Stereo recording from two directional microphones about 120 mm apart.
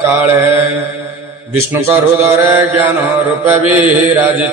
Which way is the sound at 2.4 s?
15° right (ahead or behind).